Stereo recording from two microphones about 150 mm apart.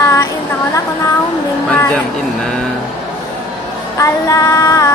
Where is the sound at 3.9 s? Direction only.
20° left (ahead or behind).